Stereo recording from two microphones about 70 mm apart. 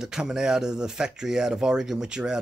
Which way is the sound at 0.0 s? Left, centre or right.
Centre.